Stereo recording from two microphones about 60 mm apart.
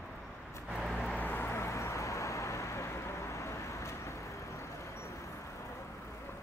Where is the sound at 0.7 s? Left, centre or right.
Centre.